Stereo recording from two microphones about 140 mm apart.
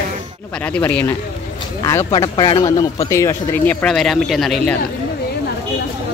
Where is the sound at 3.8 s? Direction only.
Centre (ahead or behind).